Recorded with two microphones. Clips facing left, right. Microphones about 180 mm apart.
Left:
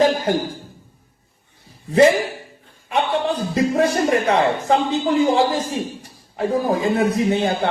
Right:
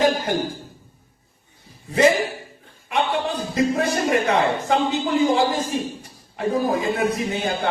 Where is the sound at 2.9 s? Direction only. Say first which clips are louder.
Left 2 dB; 35° left (ahead or behind).